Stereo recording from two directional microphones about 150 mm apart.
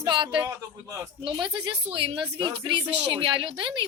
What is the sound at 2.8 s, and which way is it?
Speech, 10° right (ahead or behind).